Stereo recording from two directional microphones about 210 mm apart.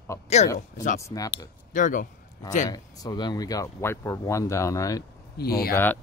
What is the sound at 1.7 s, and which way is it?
Speech, 40° left (ahead or behind).